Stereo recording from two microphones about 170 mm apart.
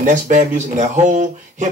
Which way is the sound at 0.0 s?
50° right (ahead or behind).